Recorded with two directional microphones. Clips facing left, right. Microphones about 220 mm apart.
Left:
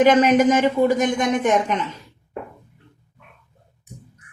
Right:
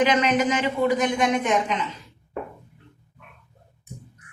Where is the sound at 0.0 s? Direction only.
45° left (ahead or behind).